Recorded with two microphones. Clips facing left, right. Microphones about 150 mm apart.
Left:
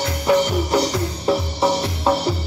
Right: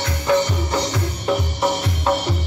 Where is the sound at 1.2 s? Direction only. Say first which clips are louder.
Left 1 dB; 30° left (ahead or behind).